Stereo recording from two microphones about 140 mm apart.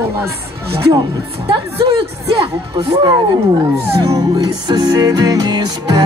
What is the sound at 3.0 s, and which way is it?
Speech, 30° right (ahead or behind).